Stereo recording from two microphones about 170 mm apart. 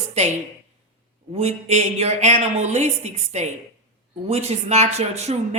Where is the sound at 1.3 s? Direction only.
40° right (ahead or behind).